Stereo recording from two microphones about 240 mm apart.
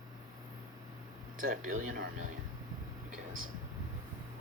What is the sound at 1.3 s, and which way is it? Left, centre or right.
Speech, right.